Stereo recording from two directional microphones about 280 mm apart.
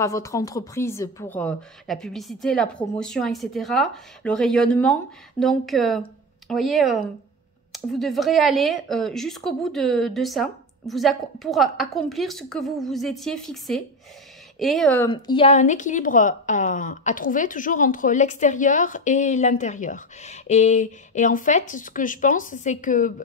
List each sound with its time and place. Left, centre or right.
0.0 s speech: centre
15.0 s a woman's voice: centre